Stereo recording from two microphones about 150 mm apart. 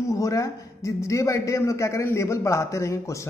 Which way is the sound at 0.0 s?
20° left (ahead or behind).